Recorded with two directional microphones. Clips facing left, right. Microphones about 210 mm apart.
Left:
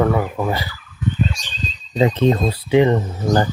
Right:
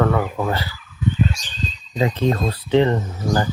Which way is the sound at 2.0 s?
20° left (ahead or behind).